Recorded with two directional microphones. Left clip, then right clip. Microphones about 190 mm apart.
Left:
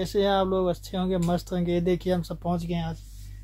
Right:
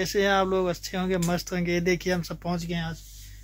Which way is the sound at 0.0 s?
Centre (ahead or behind).